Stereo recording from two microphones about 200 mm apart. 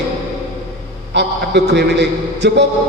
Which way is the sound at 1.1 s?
55° right (ahead or behind).